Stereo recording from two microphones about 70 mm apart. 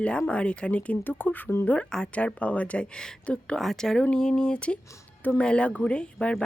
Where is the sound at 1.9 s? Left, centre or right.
Centre.